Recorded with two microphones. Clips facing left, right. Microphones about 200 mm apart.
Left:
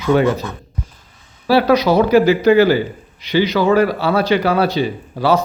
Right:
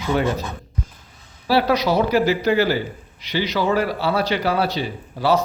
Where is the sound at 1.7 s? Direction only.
55° left (ahead or behind).